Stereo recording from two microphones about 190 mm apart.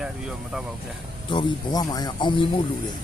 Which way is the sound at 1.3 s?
25° left (ahead or behind).